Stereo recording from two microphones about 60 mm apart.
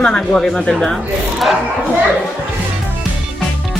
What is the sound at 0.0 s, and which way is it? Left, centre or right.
Speech, centre.